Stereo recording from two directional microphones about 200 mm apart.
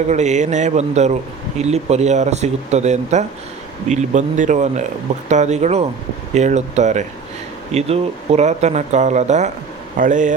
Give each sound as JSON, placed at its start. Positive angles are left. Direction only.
{"t": 0.1, "sound": "speech", "side_deg": -35}